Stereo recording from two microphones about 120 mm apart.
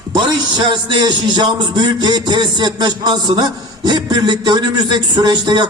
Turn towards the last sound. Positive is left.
turn(degrees=-40)  # may be behind; listen again after turning